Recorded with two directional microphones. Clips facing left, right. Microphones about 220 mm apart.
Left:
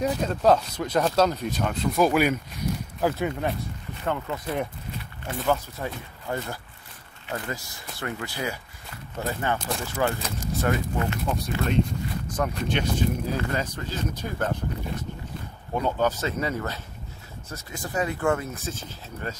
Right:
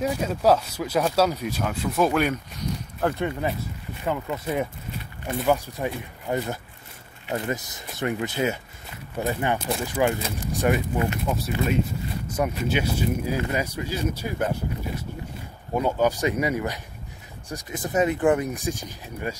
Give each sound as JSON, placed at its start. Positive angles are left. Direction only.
{"t": 0.0, "sound": "speech", "side_deg": -5}